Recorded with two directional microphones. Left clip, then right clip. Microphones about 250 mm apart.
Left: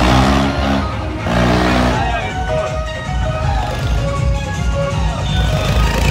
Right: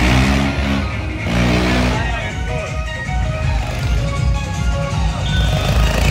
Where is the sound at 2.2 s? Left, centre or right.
Centre.